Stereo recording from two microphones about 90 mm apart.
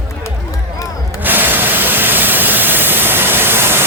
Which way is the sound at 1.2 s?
20° right (ahead or behind).